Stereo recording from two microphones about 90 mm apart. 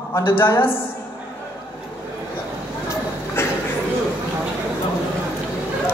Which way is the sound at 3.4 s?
30° left (ahead or behind).